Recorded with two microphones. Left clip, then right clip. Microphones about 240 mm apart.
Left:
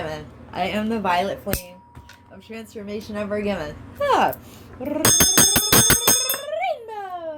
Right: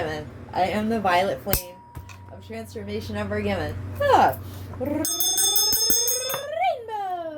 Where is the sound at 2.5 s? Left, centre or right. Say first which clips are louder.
Even; left.